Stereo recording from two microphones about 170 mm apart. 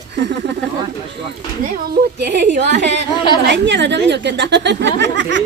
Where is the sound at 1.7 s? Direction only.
75° right (ahead or behind).